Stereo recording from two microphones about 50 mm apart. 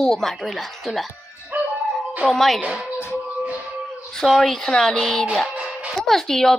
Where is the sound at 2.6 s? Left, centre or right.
Right.